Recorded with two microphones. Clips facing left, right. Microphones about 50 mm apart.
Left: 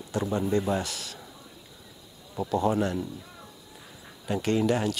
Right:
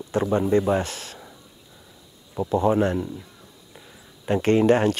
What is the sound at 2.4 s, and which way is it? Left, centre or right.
Speech, right.